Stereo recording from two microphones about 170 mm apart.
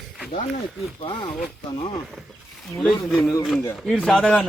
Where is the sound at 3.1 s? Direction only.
5° left (ahead or behind).